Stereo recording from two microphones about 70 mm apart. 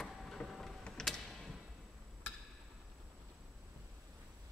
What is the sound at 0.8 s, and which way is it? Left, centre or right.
Music, centre.